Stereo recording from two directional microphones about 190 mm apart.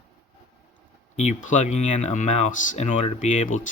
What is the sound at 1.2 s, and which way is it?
Speech, 40° left (ahead or behind).